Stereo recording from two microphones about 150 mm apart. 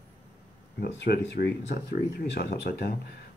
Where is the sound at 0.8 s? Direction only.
90° left.